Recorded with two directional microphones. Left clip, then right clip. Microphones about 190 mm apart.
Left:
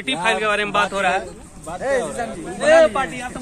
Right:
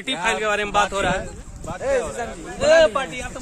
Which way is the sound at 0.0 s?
70° right (ahead or behind).